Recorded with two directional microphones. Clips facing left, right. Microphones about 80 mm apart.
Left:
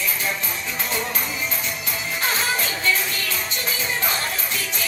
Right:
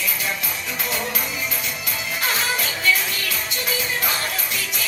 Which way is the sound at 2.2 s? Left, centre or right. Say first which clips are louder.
Even; left.